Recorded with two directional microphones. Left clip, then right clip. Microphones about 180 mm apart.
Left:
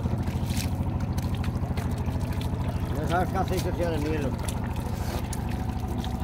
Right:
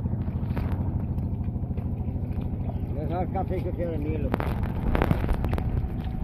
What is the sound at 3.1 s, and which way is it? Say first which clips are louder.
Vehicle: left 3 dB; 60° left (ahead or behind).